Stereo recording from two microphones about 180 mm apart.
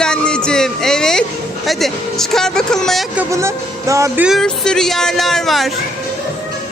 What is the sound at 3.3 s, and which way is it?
Music, 15° right (ahead or behind).